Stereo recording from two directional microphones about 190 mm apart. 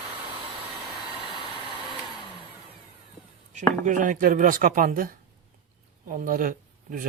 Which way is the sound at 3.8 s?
45° right (ahead or behind).